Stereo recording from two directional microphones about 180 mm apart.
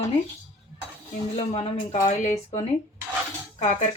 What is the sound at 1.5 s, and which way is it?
Speech, 35° left (ahead or behind).